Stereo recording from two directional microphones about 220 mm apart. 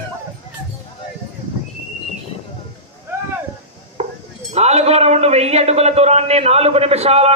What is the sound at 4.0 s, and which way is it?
Chink, 30° right (ahead or behind).